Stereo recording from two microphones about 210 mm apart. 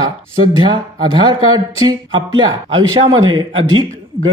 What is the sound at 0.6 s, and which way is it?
Speech, 20° right (ahead or behind).